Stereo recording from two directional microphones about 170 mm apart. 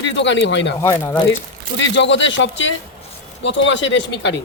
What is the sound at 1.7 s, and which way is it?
Speech, 90° left.